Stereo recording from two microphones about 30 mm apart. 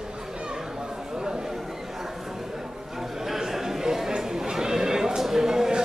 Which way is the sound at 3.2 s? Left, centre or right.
Centre.